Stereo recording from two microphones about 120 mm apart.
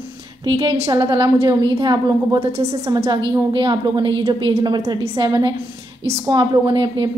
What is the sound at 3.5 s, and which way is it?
A woman's voice, 40° right (ahead or behind).